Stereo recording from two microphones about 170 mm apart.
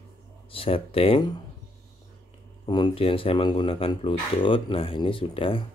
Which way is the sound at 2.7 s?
25° left (ahead or behind).